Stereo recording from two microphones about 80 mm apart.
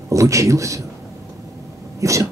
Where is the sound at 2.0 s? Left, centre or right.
Right.